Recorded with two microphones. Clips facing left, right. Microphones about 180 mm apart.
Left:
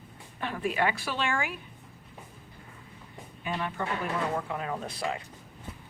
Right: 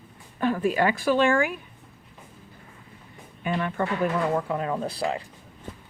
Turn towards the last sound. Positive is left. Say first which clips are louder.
# right 6 dB
turn(degrees=-35)  # may be behind; listen again after turning